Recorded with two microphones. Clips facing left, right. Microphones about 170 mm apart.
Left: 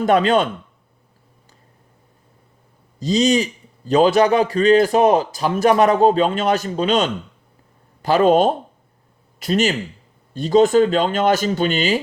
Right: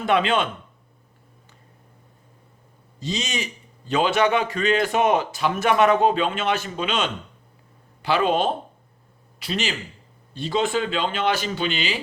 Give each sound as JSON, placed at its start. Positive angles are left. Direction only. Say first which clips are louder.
{"t": 0.0, "sound": "a man's voice", "louder": "left 5 dB", "side_deg": 40}
{"t": 3.0, "sound": "a man's voice", "louder": "left 12 dB", "side_deg": 35}